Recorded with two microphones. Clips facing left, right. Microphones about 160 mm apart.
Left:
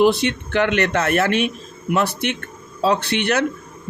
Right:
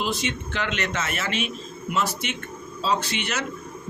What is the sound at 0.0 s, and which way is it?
Speech, 65° left (ahead or behind).